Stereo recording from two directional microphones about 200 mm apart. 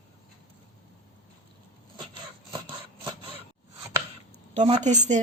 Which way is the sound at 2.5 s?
25° right (ahead or behind).